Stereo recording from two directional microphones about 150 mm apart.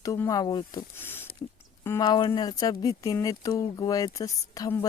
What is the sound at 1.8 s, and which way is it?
Speech, 20° left (ahead or behind).